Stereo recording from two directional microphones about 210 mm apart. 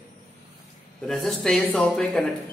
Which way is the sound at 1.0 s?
Centre (ahead or behind).